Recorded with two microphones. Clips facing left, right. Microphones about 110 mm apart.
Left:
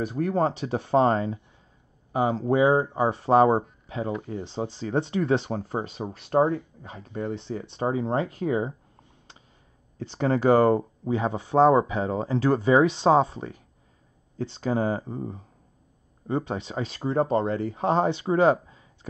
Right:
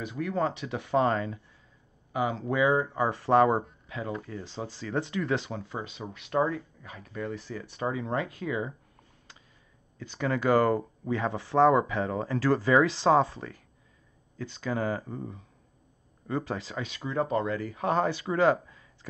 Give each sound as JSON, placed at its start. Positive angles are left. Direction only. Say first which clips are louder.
{"t": 0.0, "sound": "speech", "louder": "left 5 dB", "side_deg": 40}
{"t": 5.5, "sound": "speech", "louder": "left 7 dB", "side_deg": 40}
{"t": 9.9, "sound": "speech", "louder": "left 5 dB", "side_deg": 35}
{"t": 16.8, "sound": "speech", "louder": "left 7 dB", "side_deg": 35}